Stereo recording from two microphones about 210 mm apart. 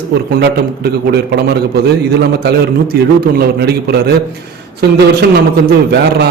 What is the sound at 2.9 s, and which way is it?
A man's voice, 45° right (ahead or behind).